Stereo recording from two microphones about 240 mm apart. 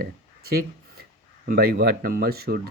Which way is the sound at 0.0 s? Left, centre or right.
Right.